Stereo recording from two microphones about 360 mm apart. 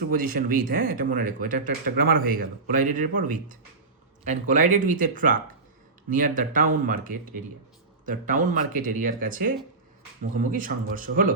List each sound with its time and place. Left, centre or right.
0.1 s speech: right
8.4 s speech: right